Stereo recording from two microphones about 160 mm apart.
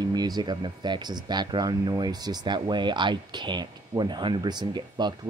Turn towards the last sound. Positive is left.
turn(degrees=-25)  # may be behind; listen again after turning